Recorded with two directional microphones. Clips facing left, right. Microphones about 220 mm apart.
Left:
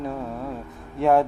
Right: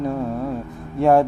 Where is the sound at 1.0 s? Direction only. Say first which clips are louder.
Right 3 dB; 45° right (ahead or behind).